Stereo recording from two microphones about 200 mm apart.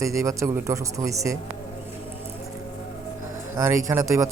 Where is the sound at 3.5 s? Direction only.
15° right (ahead or behind).